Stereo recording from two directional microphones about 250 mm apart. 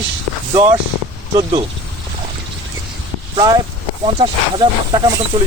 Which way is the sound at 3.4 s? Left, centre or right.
Centre.